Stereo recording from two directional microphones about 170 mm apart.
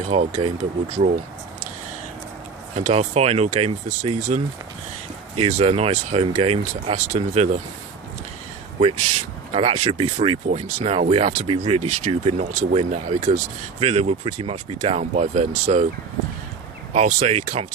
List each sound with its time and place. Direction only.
0.1 s speech: 35° right (ahead or behind)
2.7 s speech: 40° right (ahead or behind)
5.4 s speech: 40° right (ahead or behind)
8.8 s speech: 35° right (ahead or behind)
16.9 s speech: 45° right (ahead or behind)